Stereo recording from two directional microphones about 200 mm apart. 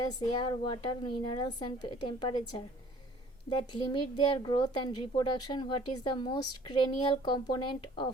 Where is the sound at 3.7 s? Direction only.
25° left (ahead or behind).